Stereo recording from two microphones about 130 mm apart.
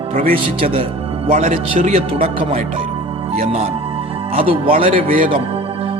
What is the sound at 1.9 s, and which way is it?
Speech, 50° right (ahead or behind).